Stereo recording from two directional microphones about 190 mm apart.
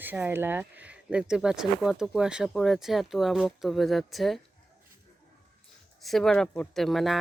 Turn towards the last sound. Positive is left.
turn(degrees=0)  # may be behind; listen again after turning